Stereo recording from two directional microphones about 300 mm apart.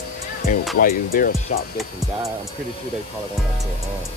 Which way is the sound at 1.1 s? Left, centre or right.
Left.